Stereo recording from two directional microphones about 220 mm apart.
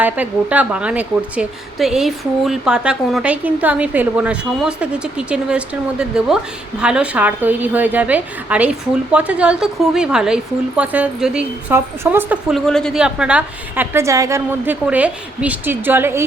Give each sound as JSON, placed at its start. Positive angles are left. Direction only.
{"t": 0.0, "sound": "a woman's voice", "side_deg": -5}